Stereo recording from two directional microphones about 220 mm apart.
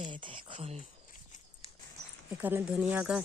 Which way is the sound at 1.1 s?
35° left (ahead or behind).